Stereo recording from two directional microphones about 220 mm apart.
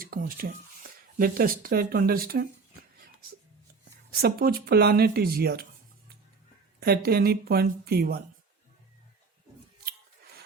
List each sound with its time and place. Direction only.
0.0 s speech: 40° right (ahead or behind)
4.1 s speech: 45° right (ahead or behind)
6.7 s speech: 45° right (ahead or behind)